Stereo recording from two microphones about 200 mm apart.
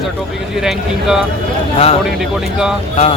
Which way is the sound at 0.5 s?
Centre (ahead or behind).